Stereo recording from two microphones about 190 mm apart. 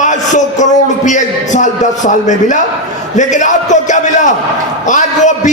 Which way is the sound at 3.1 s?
40° left (ahead or behind).